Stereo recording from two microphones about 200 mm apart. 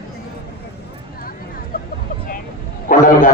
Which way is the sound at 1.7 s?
45° left (ahead or behind).